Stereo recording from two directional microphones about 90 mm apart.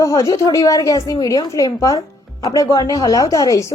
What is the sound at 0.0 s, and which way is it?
A woman's voice, 40° left (ahead or behind).